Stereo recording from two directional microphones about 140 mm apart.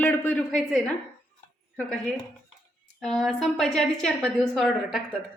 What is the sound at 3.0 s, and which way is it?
A woman's voice, centre (ahead or behind).